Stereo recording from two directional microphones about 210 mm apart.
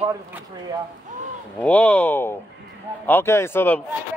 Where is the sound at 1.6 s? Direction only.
5° left (ahead or behind).